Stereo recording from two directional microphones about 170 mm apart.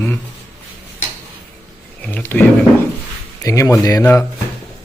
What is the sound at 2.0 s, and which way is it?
Speech, 10° left (ahead or behind).